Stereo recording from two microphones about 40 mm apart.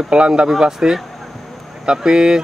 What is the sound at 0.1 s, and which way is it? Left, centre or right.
Speech, right.